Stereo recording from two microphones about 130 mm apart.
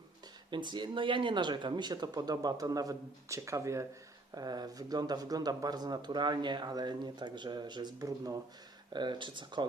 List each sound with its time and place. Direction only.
0.5 s speech: 35° right (ahead or behind)